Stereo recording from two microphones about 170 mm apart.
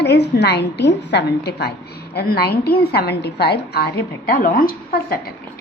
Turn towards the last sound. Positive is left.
turn(degrees=65)  # may be behind; listen again after turning